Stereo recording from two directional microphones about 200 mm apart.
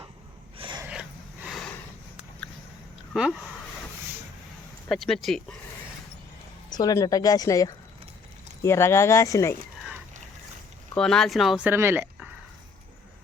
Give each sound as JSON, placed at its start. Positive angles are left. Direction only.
{"t": 0.6, "sound": "a sound", "side_deg": -25}
{"t": 0.9, "sound": "snort", "side_deg": -5}
{"t": 3.1, "sound": "speech", "side_deg": 0}
{"t": 4.9, "sound": "speech", "side_deg": 0}
{"t": 6.7, "sound": "speech", "side_deg": 20}
{"t": 9.7, "sound": "a sound", "side_deg": -5}
{"t": 10.9, "sound": "speech", "side_deg": 5}